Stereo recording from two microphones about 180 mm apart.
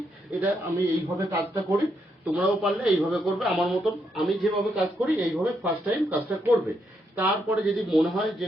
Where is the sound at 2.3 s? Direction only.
5° right (ahead or behind).